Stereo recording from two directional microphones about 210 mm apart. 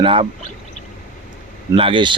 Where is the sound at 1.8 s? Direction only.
25° right (ahead or behind).